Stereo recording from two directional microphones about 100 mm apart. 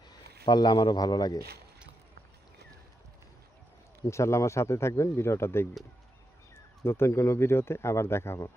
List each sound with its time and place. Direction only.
0.4 s speech: 45° left (ahead or behind)
4.0 s speech: 30° left (ahead or behind)
6.8 s speech: 25° left (ahead or behind)